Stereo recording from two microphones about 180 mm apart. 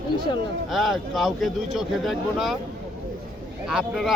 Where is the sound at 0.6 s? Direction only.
Centre (ahead or behind).